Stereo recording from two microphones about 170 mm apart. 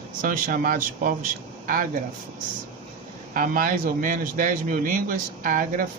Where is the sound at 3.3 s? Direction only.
55° right (ahead or behind).